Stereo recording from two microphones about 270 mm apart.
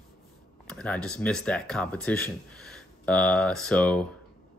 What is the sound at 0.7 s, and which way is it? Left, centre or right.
Speech, centre.